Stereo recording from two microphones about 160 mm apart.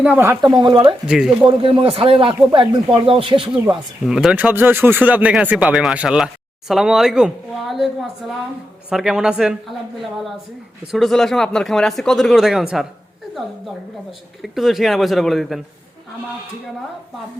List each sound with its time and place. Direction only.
0.0 s speech: 10° right (ahead or behind)
0.5 s speech: 25° right (ahead or behind)
1.0 s speech: 5° right (ahead or behind)
1.5 s a man's voice: 30° right (ahead or behind)
4.0 s speech: 5° right (ahead or behind)
8.9 s speech: 5° right (ahead or behind)
10.9 s speech: centre (ahead or behind)
14.4 s speech: centre (ahead or behind)